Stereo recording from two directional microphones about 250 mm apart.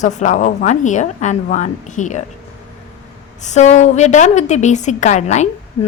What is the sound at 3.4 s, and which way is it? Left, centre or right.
A woman's voice, left.